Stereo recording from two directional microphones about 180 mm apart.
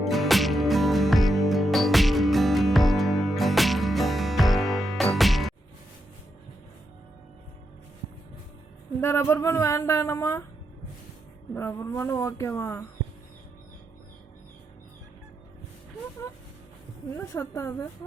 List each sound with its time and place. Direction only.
0.0 s music: centre (ahead or behind)
9.0 s speech: 15° left (ahead or behind)
11.5 s speech: 15° left (ahead or behind)
17.1 s speech: 10° left (ahead or behind)